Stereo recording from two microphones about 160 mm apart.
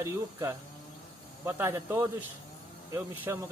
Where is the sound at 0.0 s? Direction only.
15° right (ahead or behind).